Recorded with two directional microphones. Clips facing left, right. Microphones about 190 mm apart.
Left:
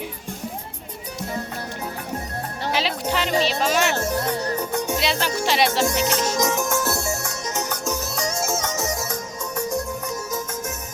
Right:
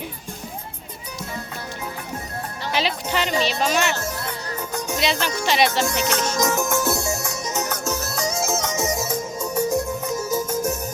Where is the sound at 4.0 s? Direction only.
40° left (ahead or behind).